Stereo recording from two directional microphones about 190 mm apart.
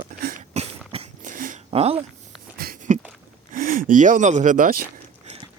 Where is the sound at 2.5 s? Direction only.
50° right (ahead or behind).